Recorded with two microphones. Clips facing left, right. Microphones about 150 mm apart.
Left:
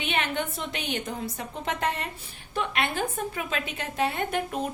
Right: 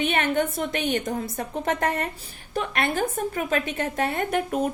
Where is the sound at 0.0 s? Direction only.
45° right (ahead or behind).